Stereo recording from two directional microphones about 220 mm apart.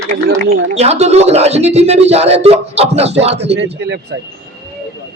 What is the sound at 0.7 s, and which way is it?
Speech, 30° right (ahead or behind).